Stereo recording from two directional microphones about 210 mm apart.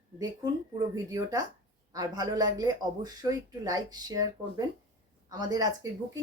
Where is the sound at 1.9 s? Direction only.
20° right (ahead or behind).